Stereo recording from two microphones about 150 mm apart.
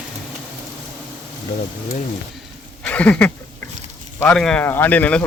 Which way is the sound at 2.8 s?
10° left (ahead or behind).